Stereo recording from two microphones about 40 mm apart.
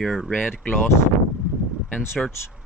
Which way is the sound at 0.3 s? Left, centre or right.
Left.